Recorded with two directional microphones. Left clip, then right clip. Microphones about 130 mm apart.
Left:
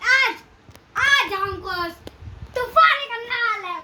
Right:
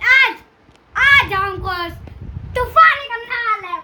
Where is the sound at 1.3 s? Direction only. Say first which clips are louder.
Right 6 dB; 35° right (ahead or behind).